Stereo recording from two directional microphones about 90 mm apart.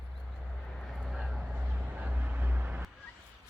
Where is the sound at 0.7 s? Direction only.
5° left (ahead or behind).